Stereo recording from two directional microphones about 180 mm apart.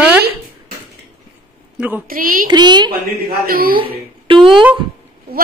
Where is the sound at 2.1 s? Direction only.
50° right (ahead or behind).